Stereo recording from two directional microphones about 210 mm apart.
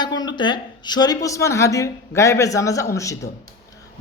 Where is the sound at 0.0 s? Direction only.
20° left (ahead or behind).